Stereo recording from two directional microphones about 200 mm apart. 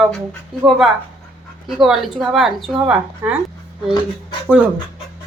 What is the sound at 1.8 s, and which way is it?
Speech, centre (ahead or behind).